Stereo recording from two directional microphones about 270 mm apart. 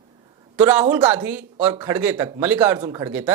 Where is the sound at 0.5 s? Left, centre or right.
Centre.